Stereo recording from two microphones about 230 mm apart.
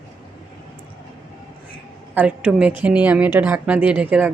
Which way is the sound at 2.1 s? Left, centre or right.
Centre.